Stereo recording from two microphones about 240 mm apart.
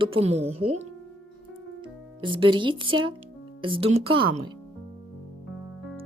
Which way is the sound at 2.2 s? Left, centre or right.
Right.